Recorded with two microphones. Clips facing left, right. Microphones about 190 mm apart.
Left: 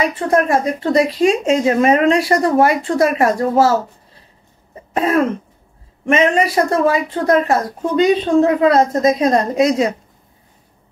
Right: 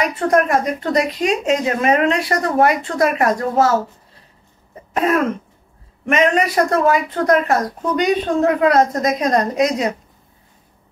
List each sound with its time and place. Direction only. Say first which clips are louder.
0.3 s a woman's voice: left 1 dB; 30° left (ahead or behind)
4.9 s throat clearing: left 1 dB; 30° left (ahead or behind)
6.0 s speech: left 2 dB; 30° left (ahead or behind)